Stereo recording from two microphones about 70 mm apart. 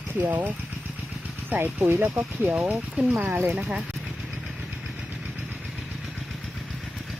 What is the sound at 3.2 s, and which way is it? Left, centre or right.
Speech, right.